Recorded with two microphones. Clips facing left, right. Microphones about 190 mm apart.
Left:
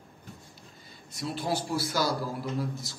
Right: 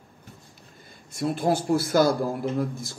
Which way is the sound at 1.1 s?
50° right (ahead or behind).